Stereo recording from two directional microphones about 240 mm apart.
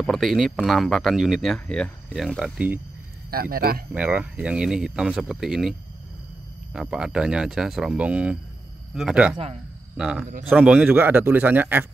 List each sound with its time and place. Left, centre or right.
0.0 s speech: centre
3.3 s speech: right
3.9 s a man's voice: centre